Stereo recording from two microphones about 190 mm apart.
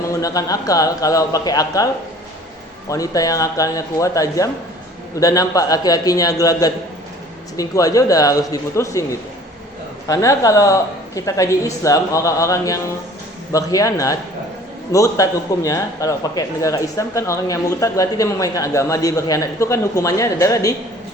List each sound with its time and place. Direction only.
0.1 s a man's voice: 20° left (ahead or behind)
2.9 s a man's voice: 20° left (ahead or behind)
10.1 s a man's voice: 15° left (ahead or behind)